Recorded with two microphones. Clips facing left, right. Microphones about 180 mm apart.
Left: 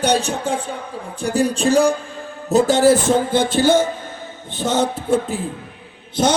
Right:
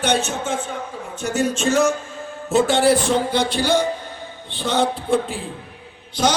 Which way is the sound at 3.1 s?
50° left (ahead or behind).